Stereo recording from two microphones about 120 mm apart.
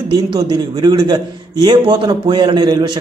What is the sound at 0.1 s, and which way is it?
A man's voice, 35° right (ahead or behind).